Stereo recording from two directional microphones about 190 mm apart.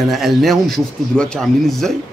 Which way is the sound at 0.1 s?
Centre (ahead or behind).